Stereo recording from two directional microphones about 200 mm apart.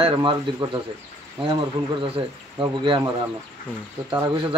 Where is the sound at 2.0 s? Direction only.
25° right (ahead or behind).